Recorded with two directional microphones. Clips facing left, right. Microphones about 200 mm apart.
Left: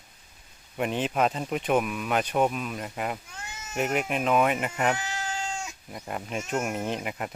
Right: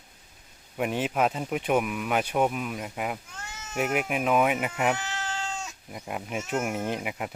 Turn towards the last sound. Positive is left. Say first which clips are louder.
# even
turn(degrees=-5)  # may be behind; listen again after turning